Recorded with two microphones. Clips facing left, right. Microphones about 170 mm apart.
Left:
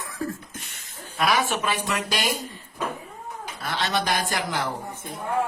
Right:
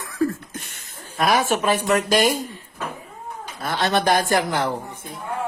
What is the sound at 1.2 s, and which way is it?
Speech, 45° right (ahead or behind).